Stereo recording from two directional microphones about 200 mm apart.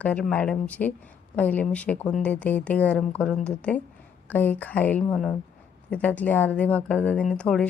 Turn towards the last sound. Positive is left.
turn(degrees=5)  # may be behind; listen again after turning